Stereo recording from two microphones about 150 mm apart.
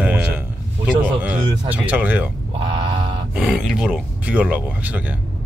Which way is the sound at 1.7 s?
10° right (ahead or behind).